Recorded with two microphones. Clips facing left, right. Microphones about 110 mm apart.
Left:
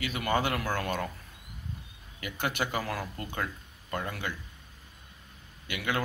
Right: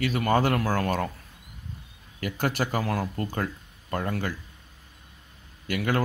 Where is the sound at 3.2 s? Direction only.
40° right (ahead or behind).